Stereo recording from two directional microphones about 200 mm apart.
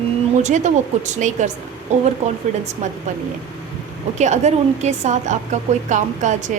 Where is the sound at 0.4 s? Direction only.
35° right (ahead or behind).